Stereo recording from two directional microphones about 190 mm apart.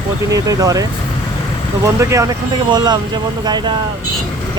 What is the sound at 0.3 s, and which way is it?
Speech, 20° right (ahead or behind).